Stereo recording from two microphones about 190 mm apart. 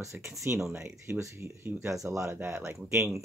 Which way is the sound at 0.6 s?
5° right (ahead or behind).